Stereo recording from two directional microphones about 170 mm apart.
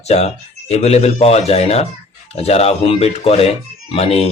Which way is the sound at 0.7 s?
40° left (ahead or behind).